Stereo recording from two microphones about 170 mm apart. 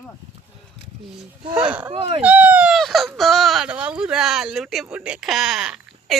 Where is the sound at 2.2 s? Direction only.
10° right (ahead or behind).